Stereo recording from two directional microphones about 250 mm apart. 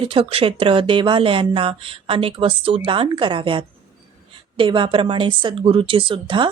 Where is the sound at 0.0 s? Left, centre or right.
Right.